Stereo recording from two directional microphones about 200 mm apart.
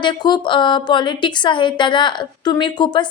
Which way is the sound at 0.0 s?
20° left (ahead or behind).